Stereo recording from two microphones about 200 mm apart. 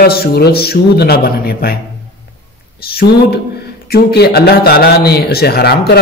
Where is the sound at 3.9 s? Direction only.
50° left (ahead or behind).